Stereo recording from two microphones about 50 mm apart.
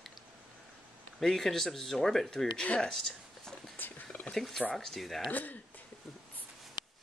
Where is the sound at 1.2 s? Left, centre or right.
Centre.